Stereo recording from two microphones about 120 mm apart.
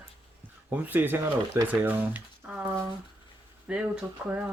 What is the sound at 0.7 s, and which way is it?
Speech, 15° right (ahead or behind).